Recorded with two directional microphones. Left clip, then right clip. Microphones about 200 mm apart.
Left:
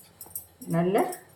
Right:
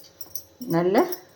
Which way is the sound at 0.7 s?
40° right (ahead or behind).